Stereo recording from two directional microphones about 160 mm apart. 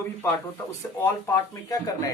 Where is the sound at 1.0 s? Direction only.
15° left (ahead or behind).